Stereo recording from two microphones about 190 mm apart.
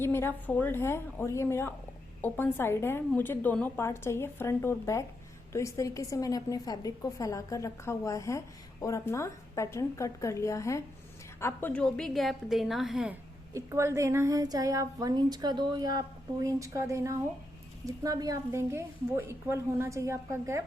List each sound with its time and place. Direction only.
0.0 s a woman's voice: 10° left (ahead or behind)
13.5 s a woman's voice: 15° right (ahead or behind)